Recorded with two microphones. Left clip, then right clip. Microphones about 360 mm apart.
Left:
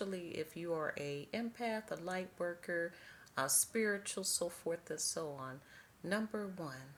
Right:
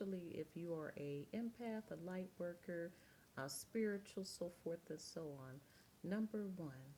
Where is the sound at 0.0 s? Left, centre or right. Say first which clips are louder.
Left 7 dB; right.